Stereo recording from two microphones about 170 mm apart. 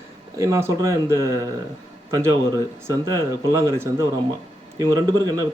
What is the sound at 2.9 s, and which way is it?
Speech, 20° right (ahead or behind).